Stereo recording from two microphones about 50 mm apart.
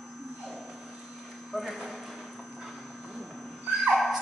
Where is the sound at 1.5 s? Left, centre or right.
Centre.